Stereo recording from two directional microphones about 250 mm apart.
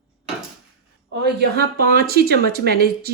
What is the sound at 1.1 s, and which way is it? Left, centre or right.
Speech, right.